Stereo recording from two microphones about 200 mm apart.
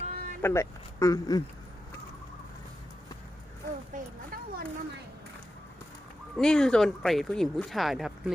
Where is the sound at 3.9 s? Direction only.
45° right (ahead or behind).